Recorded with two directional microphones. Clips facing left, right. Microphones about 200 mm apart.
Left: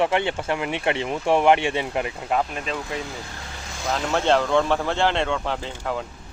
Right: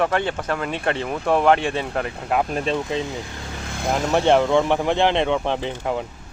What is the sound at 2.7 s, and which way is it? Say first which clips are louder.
Speech: right 6 dB; 20° right (ahead or behind).